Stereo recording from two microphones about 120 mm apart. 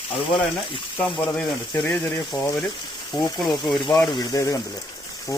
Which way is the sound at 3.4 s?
5° left (ahead or behind).